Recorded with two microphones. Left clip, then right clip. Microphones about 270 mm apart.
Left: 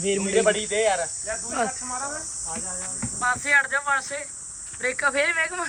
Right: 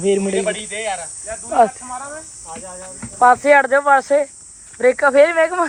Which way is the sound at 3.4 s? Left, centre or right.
Right.